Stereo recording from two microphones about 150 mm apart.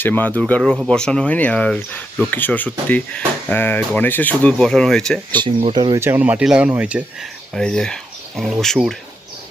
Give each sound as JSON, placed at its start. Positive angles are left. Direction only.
{"t": 0.0, "sound": "speech", "side_deg": 10}
{"t": 5.6, "sound": "speech", "side_deg": -30}
{"t": 6.0, "sound": "speech", "side_deg": -15}
{"t": 7.5, "sound": "speech", "side_deg": 5}